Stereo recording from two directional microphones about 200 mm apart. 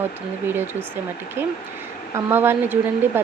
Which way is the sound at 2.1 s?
10° right (ahead or behind).